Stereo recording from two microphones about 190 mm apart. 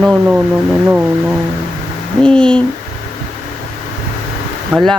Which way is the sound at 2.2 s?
5° left (ahead or behind).